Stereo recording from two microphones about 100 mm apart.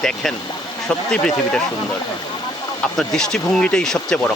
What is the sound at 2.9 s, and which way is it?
Speech, 5° left (ahead or behind).